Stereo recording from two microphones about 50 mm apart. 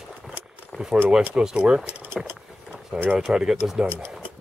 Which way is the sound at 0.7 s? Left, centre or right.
Left.